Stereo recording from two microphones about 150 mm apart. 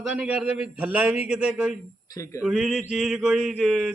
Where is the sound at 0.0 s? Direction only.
5° right (ahead or behind).